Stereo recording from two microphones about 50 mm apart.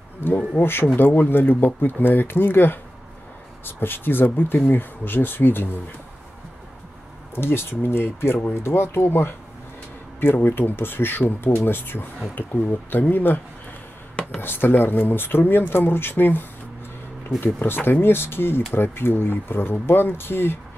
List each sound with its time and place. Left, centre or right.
0.2 s speech: left
7.3 s speech: left
14.4 s speech: left
17.6 s speech: left